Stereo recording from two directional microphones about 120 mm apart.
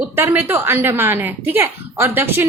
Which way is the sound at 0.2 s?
20° right (ahead or behind).